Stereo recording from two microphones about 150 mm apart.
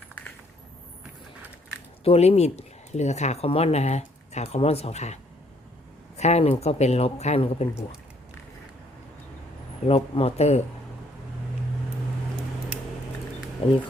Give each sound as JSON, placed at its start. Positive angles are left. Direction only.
{"t": 2.0, "sound": "speech", "side_deg": 45}
{"t": 9.8, "sound": "speech", "side_deg": 40}
{"t": 13.6, "sound": "speech", "side_deg": 40}